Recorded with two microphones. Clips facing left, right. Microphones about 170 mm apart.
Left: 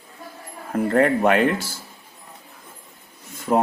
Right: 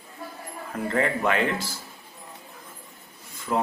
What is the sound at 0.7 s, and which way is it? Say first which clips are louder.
Speech: left 7 dB; 55° left (ahead or behind).